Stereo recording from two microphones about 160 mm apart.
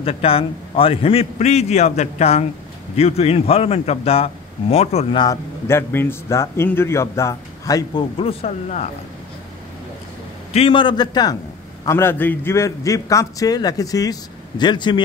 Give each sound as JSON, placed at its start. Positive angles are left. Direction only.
{"t": 0.0, "sound": "a man's voice", "side_deg": 35}
{"t": 5.2, "sound": "a man's voice", "side_deg": 20}
{"t": 8.2, "sound": "a man's voice", "side_deg": 40}
{"t": 10.5, "sound": "a man's voice", "side_deg": 35}